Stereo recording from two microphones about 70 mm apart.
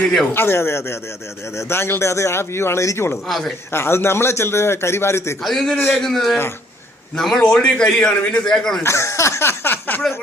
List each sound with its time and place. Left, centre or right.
0.0 s speech: centre
0.3 s a man's voice: left
3.2 s a man's voice: centre
3.7 s a man's voice: left
5.4 s a man's voice: centre
8.8 s speech: left